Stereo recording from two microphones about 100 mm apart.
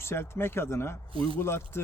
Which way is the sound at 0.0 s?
25° left (ahead or behind).